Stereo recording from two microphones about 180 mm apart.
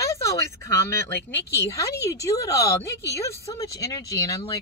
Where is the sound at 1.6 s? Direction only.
20° left (ahead or behind).